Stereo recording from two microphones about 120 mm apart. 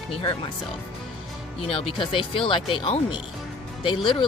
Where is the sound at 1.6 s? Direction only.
50° left (ahead or behind).